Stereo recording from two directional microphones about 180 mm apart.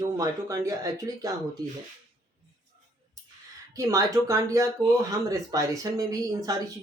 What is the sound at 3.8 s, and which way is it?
Speech, 20° right (ahead or behind).